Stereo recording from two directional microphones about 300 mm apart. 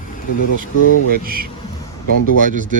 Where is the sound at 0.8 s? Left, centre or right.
Left.